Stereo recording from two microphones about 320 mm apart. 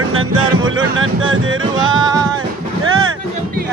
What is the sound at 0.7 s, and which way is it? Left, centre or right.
Music, right.